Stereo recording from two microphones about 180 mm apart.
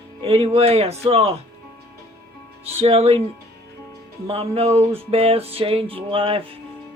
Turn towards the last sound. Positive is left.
turn(degrees=-30)  # may be behind; listen again after turning